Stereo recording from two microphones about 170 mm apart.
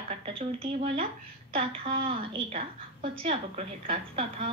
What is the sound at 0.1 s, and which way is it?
A woman's voice, 35° right (ahead or behind).